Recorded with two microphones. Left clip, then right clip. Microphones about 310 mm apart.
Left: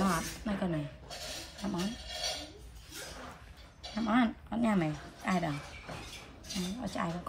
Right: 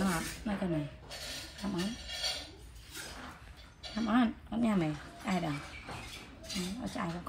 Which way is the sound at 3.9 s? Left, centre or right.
Centre.